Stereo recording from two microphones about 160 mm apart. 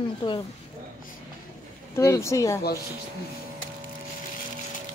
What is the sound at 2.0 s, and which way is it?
Speech, 20° left (ahead or behind).